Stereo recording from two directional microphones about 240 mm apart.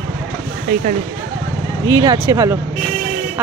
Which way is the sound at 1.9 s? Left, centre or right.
Centre.